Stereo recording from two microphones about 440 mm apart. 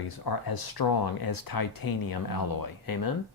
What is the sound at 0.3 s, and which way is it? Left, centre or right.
Speech, left.